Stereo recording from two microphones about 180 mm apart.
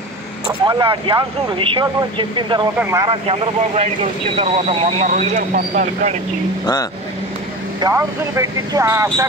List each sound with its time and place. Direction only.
0.7 s speech: 25° right (ahead or behind)
3.1 s speech: 35° right (ahead or behind)
6.6 s speech: 20° left (ahead or behind)
7.8 s speech: 15° right (ahead or behind)